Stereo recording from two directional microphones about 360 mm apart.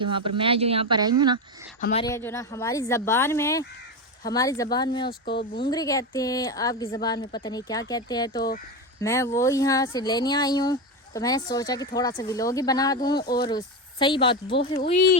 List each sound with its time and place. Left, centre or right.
0.0 s speech: centre
1.8 s speech: centre
5.2 s speech: left
5.7 s speech: centre